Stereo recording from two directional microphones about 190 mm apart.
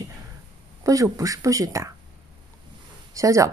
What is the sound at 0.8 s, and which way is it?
Speech, 15° right (ahead or behind).